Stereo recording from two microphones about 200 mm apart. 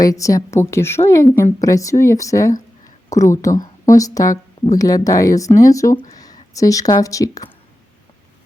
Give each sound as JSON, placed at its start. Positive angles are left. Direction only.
{"t": 0.0, "sound": "speech", "side_deg": 15}